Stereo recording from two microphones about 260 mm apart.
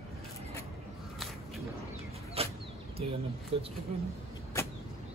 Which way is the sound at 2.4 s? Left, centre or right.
Right.